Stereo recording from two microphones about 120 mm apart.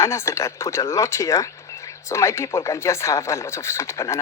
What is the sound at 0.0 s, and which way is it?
Speech, 25° left (ahead or behind).